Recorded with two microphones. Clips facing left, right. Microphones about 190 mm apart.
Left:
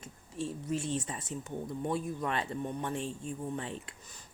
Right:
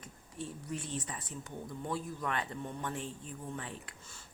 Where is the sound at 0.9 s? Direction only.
25° left (ahead or behind).